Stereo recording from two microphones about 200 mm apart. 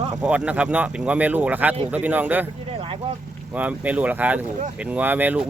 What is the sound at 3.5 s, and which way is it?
Speech, 5° right (ahead or behind).